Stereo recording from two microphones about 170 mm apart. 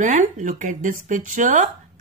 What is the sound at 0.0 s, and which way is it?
A woman's voice, 45° right (ahead or behind).